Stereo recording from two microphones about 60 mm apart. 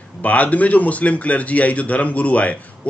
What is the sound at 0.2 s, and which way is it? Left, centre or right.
A man's voice, left.